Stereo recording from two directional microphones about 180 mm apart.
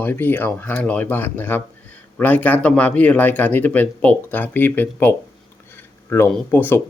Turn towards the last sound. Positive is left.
turn(degrees=10)  # may be behind; listen again after turning